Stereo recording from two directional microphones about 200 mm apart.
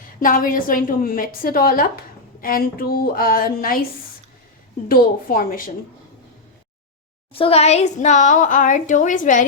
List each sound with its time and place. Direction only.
0.2 s a woman's voice: 45° left (ahead or behind)
4.9 s a woman's voice: 45° left (ahead or behind)
7.3 s a woman's voice: 30° left (ahead or behind)